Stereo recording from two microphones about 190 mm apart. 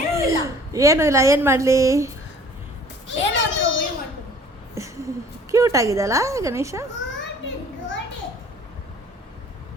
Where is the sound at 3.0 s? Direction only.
75° left (ahead or behind).